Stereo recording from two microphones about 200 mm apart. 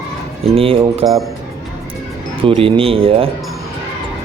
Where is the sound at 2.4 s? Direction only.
25° right (ahead or behind).